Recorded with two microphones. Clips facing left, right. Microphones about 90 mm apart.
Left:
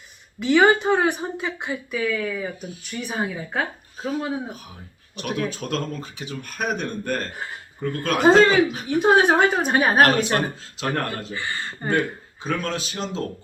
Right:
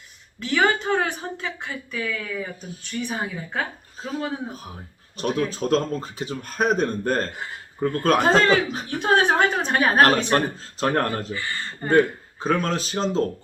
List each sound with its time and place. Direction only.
0.3 s speech: 15° left (ahead or behind)
5.1 s speech: 35° right (ahead or behind)
8.2 s speech: 10° left (ahead or behind)
10.3 s speech: 35° right (ahead or behind)
11.3 s speech: 20° left (ahead or behind)
11.9 s speech: 35° right (ahead or behind)